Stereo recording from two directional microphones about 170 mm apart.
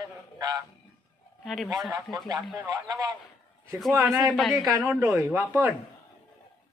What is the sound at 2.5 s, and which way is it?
Speech, 20° right (ahead or behind).